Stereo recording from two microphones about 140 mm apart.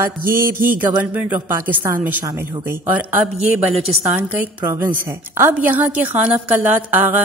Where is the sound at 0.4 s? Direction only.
90° right.